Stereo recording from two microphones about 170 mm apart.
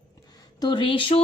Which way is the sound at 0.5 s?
25° left (ahead or behind).